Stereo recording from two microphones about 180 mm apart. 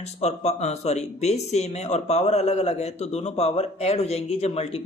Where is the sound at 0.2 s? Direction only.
35° left (ahead or behind).